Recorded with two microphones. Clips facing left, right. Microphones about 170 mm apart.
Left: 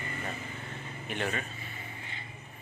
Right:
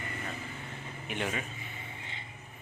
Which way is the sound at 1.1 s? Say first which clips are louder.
Left 1 dB; 10° right (ahead or behind).